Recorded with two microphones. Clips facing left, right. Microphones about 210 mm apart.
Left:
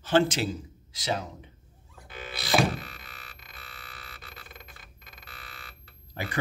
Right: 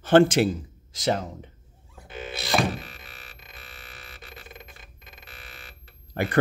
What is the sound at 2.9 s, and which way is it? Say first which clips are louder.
Music: right 2 dB; 20° right (ahead or behind).